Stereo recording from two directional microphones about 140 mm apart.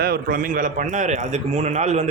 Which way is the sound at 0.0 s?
90° right.